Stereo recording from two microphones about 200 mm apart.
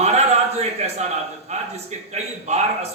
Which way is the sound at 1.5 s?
35° right (ahead or behind).